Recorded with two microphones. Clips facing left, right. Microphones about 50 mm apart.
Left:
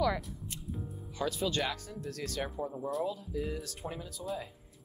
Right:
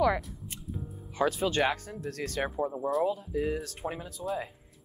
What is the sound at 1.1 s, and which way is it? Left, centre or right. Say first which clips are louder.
A woman's voice: right 5 dB; right.